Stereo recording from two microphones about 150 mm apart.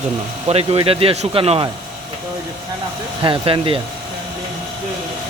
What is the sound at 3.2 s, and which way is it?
Speech, 35° right (ahead or behind).